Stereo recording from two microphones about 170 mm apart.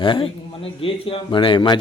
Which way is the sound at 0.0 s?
30° left (ahead or behind).